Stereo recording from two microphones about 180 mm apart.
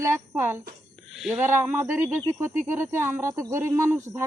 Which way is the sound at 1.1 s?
Centre (ahead or behind).